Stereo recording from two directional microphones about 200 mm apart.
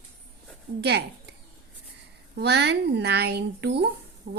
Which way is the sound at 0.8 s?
55° right (ahead or behind).